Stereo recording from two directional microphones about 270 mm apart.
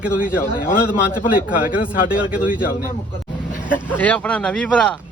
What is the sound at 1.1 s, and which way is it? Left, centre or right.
Speech, left.